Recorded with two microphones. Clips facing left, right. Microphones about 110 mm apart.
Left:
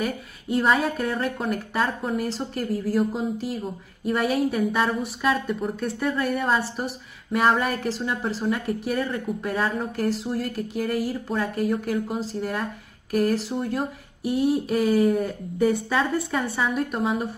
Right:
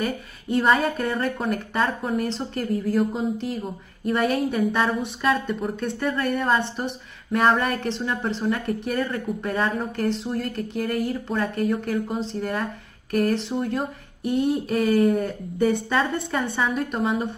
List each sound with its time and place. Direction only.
0.0 s speech: centre (ahead or behind)